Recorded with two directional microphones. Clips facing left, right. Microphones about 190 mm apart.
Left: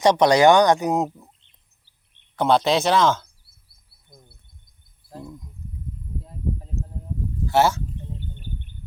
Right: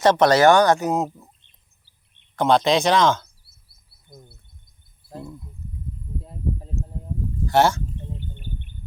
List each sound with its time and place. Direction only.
0.0 s speech: 15° left (ahead or behind)
2.3 s speech: 10° left (ahead or behind)
5.0 s speech: 10° right (ahead or behind)
7.4 s speech: 5° left (ahead or behind)